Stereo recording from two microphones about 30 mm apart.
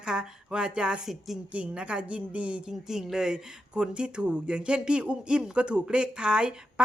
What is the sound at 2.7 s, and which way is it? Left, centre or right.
Speech, centre.